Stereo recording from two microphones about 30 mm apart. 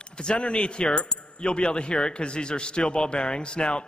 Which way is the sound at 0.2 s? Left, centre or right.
Left.